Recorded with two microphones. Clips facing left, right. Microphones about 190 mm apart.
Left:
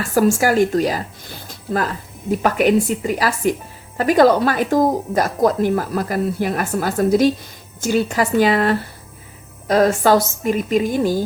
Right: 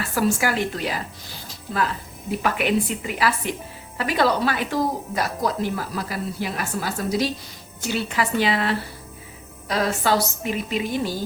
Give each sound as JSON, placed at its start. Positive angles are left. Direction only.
{"t": 0.1, "sound": "speech", "side_deg": 45}
{"t": 2.3, "sound": "speech", "side_deg": 40}